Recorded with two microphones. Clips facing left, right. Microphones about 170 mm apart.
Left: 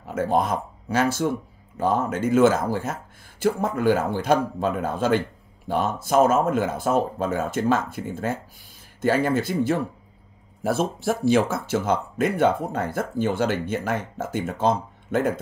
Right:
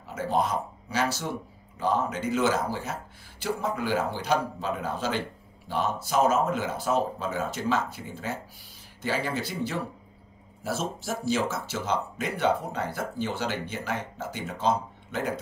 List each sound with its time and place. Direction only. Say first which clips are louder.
0.0 s speech: left 4 dB; 55° left (ahead or behind)